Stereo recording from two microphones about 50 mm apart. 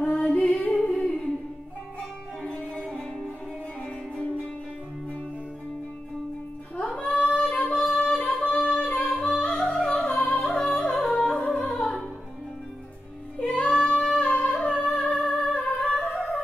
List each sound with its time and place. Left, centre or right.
0.0 s music: left
2.4 s music: left
6.8 s singing: left
7.6 s singing: centre
8.0 s music: left
8.4 s yodeling: left
9.9 s music: left
13.4 s music: left